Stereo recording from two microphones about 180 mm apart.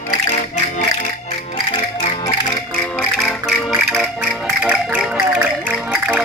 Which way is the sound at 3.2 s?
Centre (ahead or behind).